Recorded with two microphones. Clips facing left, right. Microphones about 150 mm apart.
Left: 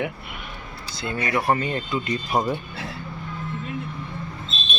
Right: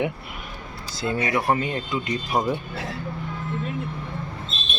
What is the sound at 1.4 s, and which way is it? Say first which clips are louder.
Speech: even; 5° right (ahead or behind).